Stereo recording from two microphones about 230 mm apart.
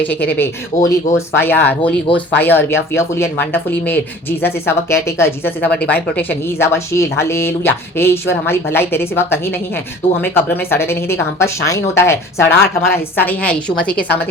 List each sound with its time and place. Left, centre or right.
0.0 s speech: centre
0.7 s speech: left
1.1 s speech: centre